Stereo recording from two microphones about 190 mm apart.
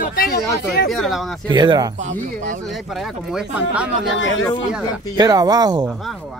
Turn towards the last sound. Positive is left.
turn(degrees=-20)  # may be behind; listen again after turning